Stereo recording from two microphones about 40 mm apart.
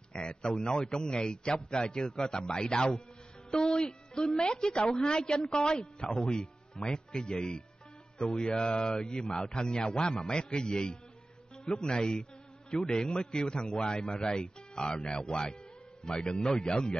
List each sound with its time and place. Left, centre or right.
0.1 s a man's voice: left